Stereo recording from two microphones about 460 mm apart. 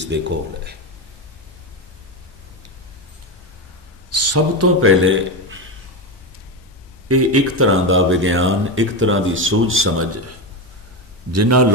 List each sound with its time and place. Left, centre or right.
0.1 s speech: right
4.1 s a man's voice: right
7.1 s speech: right
11.3 s a man's voice: right